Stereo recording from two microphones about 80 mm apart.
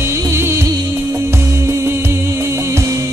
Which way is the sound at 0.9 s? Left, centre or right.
Right.